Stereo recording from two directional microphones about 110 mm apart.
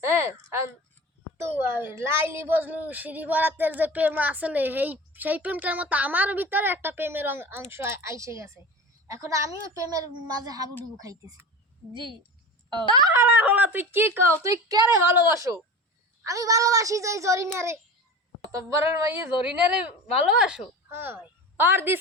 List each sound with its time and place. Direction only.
0.0 s a sound: 25° right (ahead or behind)
1.4 s a woman's voice: 20° right (ahead or behind)
13.1 s a woman's voice: 15° right (ahead or behind)
14.4 s speech: 30° right (ahead or behind)
18.5 s a woman's voice: 30° right (ahead or behind); by 20.7 s 5° right (ahead or behind)
20.9 s speech: 20° right (ahead or behind)